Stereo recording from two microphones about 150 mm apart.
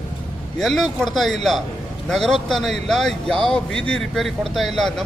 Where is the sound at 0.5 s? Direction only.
Centre (ahead or behind).